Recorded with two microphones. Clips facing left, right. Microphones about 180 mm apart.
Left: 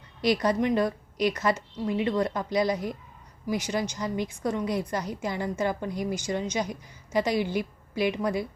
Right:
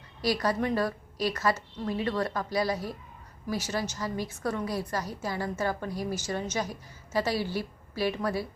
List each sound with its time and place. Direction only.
0.2 s a woman's voice: 20° left (ahead or behind)